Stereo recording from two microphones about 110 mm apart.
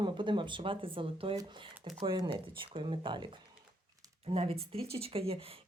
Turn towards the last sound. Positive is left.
turn(degrees=-60)  # may be behind; listen again after turning